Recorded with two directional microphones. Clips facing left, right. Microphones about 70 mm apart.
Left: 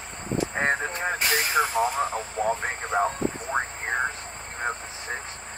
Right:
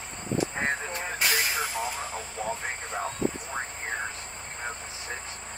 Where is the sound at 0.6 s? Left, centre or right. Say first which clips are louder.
Left 5 dB; left.